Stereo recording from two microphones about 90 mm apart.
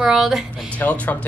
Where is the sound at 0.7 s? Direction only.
15° left (ahead or behind).